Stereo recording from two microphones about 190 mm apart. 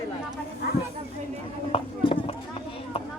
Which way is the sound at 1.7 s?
30° left (ahead or behind).